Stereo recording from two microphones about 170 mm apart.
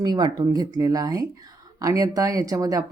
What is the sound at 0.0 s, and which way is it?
Speech, 25° right (ahead or behind).